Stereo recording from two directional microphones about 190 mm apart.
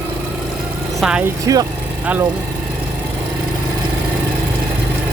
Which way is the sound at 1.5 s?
15° right (ahead or behind).